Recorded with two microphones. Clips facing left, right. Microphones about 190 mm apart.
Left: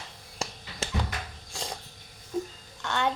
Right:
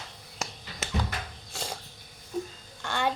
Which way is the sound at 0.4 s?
30° left (ahead or behind).